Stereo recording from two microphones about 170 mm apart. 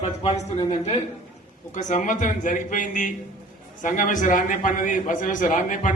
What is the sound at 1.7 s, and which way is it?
A man's voice, 50° left (ahead or behind).